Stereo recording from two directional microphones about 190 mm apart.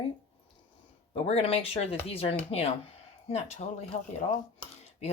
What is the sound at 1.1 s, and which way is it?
Speech, 30° left (ahead or behind).